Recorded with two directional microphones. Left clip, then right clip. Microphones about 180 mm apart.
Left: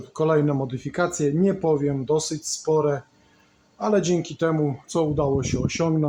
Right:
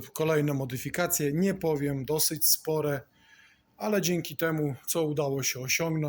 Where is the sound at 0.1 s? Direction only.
5° left (ahead or behind).